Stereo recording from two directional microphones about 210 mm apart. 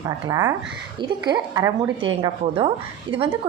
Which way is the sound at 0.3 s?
15° right (ahead or behind).